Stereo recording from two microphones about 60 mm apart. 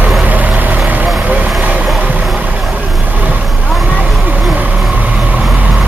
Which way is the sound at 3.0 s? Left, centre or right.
Right.